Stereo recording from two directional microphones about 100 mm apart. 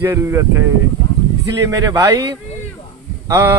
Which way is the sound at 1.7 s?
35° right (ahead or behind).